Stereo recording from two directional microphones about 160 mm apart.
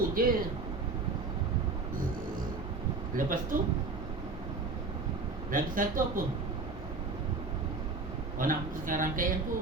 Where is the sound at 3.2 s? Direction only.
55° right (ahead or behind).